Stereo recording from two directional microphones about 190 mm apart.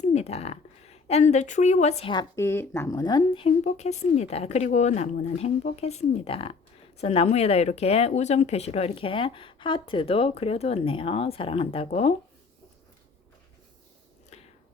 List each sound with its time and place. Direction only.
0.0 s speech: 35° left (ahead or behind)
2.3 s speech: 15° left (ahead or behind)
3.6 s speech: 40° left (ahead or behind)